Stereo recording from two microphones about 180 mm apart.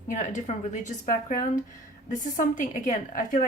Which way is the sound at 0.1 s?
45° left (ahead or behind).